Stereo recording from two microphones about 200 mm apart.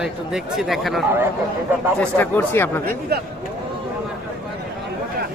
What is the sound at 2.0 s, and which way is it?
Speech, 10° left (ahead or behind).